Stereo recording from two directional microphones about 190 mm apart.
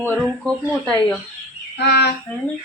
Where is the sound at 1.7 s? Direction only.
60° left (ahead or behind).